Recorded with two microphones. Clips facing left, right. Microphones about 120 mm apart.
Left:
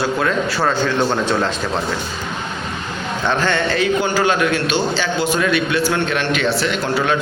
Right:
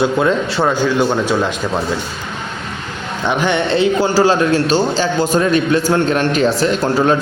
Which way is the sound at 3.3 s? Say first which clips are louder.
Right 3 dB; 15° right (ahead or behind).